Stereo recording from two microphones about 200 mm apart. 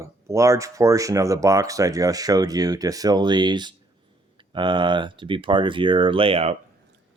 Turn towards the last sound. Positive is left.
turn(degrees=-30)  # may be behind; listen again after turning